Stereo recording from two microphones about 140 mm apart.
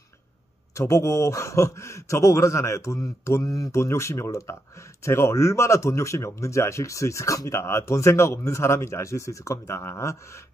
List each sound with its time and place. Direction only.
0.7 s a man's voice: 20° left (ahead or behind)